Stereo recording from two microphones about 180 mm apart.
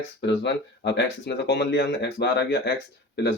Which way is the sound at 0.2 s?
75° left (ahead or behind).